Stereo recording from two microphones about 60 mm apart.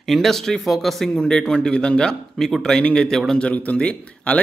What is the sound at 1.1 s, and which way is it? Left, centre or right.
Speech, centre.